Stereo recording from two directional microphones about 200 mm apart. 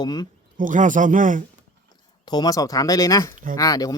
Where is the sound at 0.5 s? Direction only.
40° right (ahead or behind).